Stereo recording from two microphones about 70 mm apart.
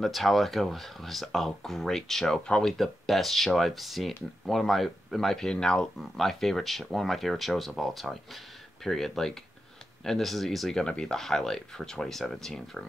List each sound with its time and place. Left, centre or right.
0.0 s speech: centre